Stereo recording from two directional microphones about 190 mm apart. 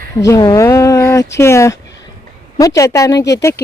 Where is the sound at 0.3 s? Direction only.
20° left (ahead or behind).